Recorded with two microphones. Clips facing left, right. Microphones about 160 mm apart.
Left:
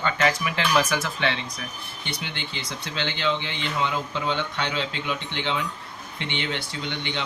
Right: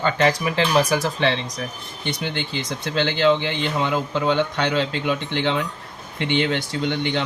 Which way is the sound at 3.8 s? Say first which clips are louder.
Right 5 dB; 45° right (ahead or behind).